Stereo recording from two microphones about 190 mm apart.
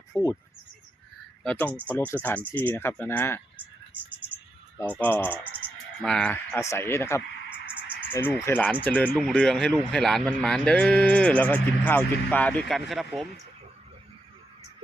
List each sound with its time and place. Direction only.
0.1 s speech: 15° left (ahead or behind)
1.5 s speech: 10° left (ahead or behind)
3.9 s speech: 10° right (ahead or behind)
4.8 s speech: 10° left (ahead or behind)